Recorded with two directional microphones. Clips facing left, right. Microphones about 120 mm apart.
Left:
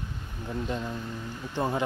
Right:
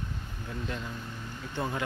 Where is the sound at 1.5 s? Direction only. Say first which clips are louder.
Left 5 dB; 20° left (ahead or behind).